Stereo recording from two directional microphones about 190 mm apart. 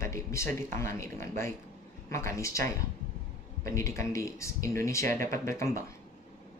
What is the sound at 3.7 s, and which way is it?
Speech, 15° left (ahead or behind).